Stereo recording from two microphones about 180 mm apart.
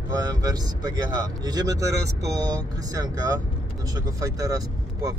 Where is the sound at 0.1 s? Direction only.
20° right (ahead or behind).